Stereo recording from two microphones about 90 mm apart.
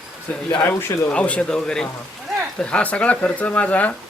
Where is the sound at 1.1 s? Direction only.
15° left (ahead or behind).